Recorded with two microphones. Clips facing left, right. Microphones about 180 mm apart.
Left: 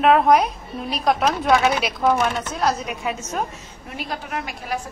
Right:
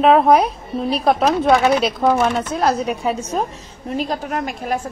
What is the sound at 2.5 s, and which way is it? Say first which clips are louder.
Speech: right 5 dB; 35° right (ahead or behind).